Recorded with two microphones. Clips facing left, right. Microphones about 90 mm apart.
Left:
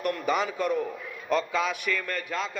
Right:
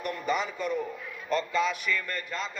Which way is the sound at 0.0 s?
65° left (ahead or behind).